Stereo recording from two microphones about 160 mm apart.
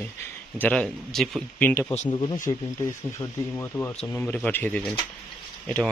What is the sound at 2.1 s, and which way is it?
Speech, 30° left (ahead or behind).